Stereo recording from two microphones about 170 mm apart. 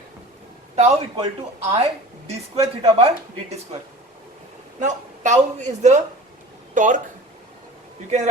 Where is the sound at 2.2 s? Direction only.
40° right (ahead or behind).